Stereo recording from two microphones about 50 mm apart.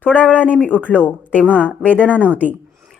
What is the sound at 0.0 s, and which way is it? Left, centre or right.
A woman's voice, left.